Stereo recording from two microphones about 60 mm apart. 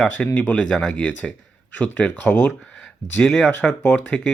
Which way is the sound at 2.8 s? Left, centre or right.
Centre.